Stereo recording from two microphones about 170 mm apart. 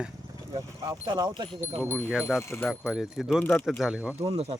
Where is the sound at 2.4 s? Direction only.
15° left (ahead or behind).